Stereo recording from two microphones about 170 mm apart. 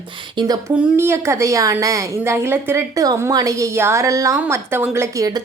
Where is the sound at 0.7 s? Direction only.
10° right (ahead or behind).